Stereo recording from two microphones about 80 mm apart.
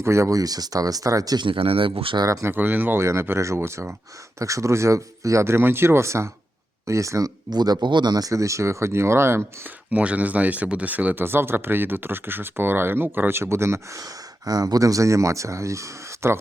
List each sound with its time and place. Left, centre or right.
0.0 s speech: right
1.4 s speech: right
2.2 s speech: right
2.5 s speech: right
3.0 s speech: right
7.5 s speech: right
9.9 s speech: centre; by 14.0 s right
14.0 s speech: right